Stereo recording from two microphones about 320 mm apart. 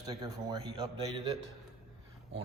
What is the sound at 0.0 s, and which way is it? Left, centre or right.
Speech, centre.